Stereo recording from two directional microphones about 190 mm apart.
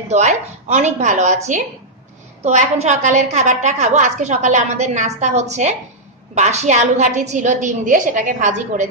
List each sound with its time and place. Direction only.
0.1 s a woman's voice: 35° right (ahead or behind)